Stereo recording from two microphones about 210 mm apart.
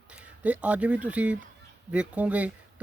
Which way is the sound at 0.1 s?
5° right (ahead or behind).